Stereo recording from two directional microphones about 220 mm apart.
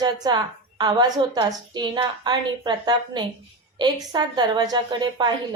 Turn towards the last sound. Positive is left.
turn(degrees=-20)  # may be behind; listen again after turning